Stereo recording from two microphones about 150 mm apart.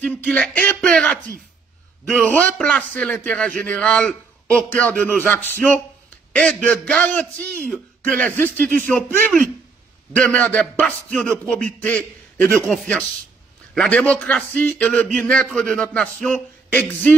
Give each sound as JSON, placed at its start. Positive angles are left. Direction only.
{"t": 0.0, "sound": "speech", "side_deg": 10}
{"t": 2.6, "sound": "speech", "side_deg": 5}